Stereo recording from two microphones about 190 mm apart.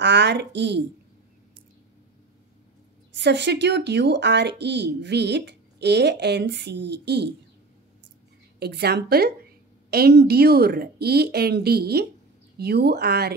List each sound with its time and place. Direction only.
0.0 s a woman's voice: 65° right (ahead or behind)
3.2 s a woman's voice: 65° right (ahead or behind)
8.5 s a woman's voice: 60° right (ahead or behind)